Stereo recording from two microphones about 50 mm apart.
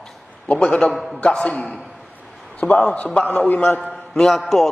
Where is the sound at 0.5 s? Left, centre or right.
Left.